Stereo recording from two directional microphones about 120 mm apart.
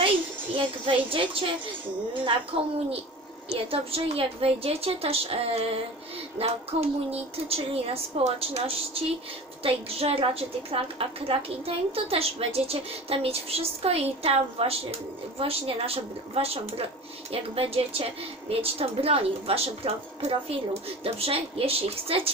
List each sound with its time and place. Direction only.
0.5 s a woman's voice: 50° right (ahead or behind)
2.5 s a woman's voice: 50° right (ahead or behind)